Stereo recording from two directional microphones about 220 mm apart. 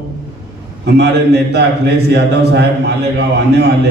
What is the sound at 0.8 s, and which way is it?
A man's voice, 50° right (ahead or behind).